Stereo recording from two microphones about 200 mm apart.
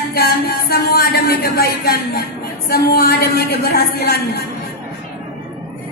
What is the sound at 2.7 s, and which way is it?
A woman's voice, 50° left (ahead or behind).